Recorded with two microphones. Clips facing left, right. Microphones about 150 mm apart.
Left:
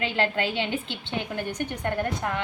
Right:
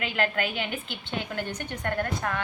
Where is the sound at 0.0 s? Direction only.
30° left (ahead or behind).